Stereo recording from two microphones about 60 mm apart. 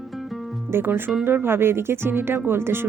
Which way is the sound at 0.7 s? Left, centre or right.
Right.